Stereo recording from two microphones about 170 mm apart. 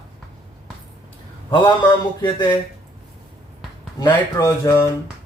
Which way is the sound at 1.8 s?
25° left (ahead or behind).